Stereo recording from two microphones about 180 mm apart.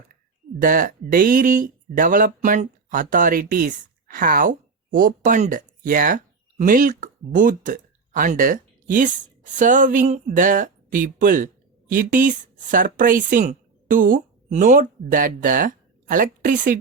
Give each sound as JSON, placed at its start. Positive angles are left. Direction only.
{"t": 0.6, "sound": "speech", "side_deg": -50}